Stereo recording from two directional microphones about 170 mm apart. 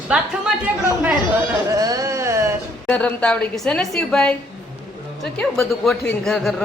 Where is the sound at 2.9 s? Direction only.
10° left (ahead or behind).